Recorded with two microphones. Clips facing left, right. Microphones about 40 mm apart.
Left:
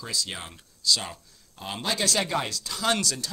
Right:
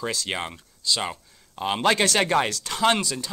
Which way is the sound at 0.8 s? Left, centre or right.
Right.